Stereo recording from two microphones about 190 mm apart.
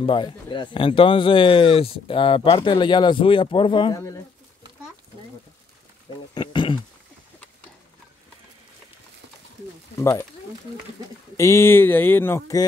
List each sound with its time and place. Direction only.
0.0 s speech: 25° left (ahead or behind)
6.3 s a sound: 25° left (ahead or behind)
9.9 s speech: 15° left (ahead or behind)
11.3 s speech: 15° left (ahead or behind)